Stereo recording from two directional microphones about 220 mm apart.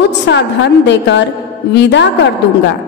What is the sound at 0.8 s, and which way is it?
A woman's voice, 55° left (ahead or behind).